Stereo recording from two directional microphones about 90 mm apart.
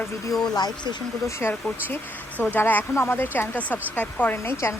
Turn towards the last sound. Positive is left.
turn(degrees=30)  # may be behind; listen again after turning